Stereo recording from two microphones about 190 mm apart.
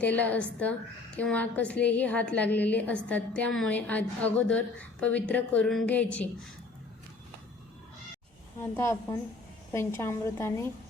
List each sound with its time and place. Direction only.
0.0 s a woman's voice: 10° left (ahead or behind)
8.6 s a woman's voice: 15° left (ahead or behind)